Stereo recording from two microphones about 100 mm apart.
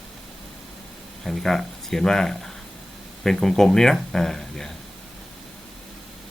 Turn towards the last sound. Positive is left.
turn(degrees=5)  # may be behind; listen again after turning